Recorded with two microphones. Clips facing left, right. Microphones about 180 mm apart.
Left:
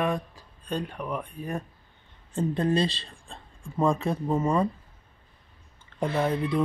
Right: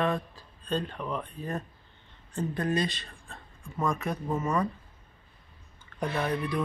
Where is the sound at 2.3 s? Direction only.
25° left (ahead or behind).